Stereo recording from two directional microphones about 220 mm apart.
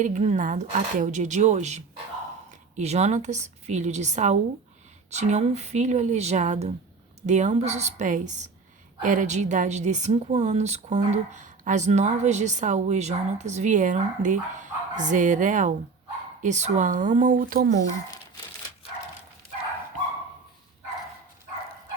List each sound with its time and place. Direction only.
0.0 s a woman's voice: 35° right (ahead or behind)